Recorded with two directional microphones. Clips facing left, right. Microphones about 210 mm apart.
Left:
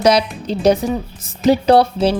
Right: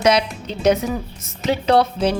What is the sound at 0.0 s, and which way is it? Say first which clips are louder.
Speech: left 3 dB; 35° left (ahead or behind).